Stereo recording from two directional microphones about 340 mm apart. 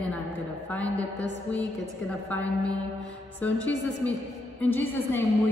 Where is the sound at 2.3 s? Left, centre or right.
Centre.